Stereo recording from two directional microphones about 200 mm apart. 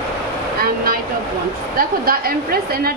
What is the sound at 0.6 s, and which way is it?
Vehicle, 45° right (ahead or behind).